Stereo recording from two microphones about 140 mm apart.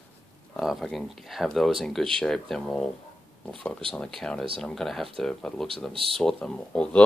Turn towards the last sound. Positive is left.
turn(degrees=5)  # may be behind; listen again after turning